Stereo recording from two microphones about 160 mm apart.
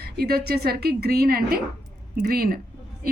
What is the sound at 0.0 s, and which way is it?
A woman's voice, 75° right (ahead or behind).